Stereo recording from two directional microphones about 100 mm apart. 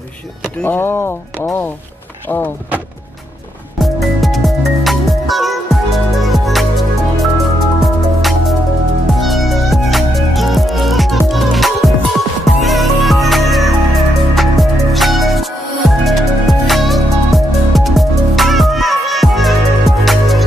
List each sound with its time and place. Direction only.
0.7 s speech: 20° left (ahead or behind)
3.7 s music: centre (ahead or behind)